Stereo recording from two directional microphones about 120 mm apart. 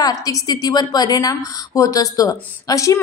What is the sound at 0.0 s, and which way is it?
A woman's voice, 30° left (ahead or behind).